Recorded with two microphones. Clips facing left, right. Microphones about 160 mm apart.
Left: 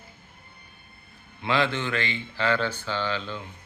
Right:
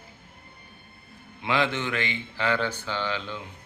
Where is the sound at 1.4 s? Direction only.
15° right (ahead or behind).